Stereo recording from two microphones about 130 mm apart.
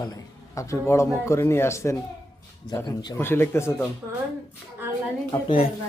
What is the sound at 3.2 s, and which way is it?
Speech, 20° left (ahead or behind).